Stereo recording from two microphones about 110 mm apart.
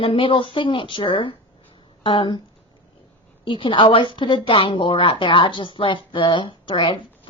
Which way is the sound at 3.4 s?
50° left (ahead or behind).